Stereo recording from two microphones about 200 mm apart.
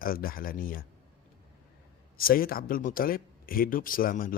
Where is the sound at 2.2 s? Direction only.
45° left (ahead or behind).